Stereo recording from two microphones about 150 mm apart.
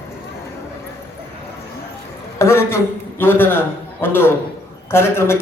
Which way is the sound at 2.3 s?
15° left (ahead or behind).